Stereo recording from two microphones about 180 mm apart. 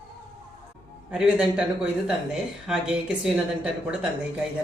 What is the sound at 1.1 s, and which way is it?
Speech, 5° right (ahead or behind).